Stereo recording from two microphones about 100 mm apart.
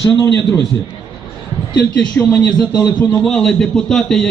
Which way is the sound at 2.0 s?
10° left (ahead or behind).